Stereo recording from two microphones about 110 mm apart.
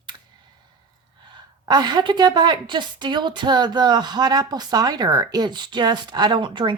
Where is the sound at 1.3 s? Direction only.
40° right (ahead or behind).